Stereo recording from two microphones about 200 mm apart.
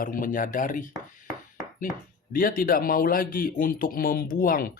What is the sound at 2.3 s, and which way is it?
Speech, 45° left (ahead or behind).